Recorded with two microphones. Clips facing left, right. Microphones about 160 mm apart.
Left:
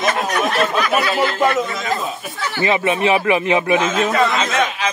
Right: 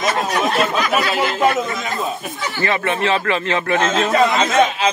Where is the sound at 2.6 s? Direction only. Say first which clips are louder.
Left 3 dB; 15° left (ahead or behind).